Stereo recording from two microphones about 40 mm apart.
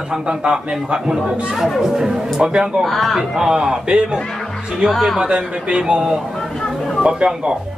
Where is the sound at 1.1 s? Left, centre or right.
Centre.